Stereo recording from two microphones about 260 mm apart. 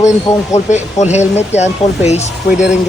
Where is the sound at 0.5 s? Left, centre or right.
Left.